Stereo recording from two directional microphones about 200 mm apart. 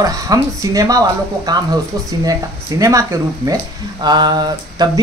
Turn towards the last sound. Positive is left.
turn(degrees=-20)  # may be behind; listen again after turning